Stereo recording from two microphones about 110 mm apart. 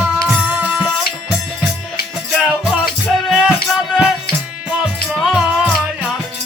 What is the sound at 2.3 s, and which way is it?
Music, centre (ahead or behind).